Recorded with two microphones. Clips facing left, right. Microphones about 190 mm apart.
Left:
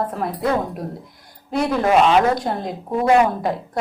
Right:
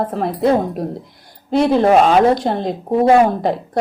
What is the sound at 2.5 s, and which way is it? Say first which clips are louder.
Speech: right 6 dB; 25° right (ahead or behind).